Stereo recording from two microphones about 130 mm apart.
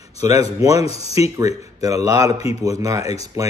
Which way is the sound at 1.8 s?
25° right (ahead or behind).